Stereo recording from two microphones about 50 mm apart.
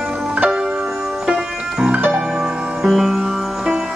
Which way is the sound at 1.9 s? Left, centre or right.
Right.